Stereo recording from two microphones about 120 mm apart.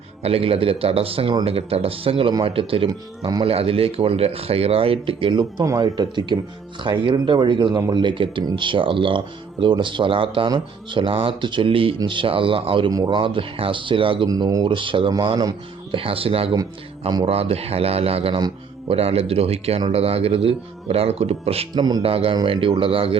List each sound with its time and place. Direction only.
0.2 s speech: 55° right (ahead or behind)
14.3 s speech: 30° right (ahead or behind)
16.0 s speech: 50° right (ahead or behind)
21.8 s speech: 35° right (ahead or behind)
22.0 s speech: 50° right (ahead or behind)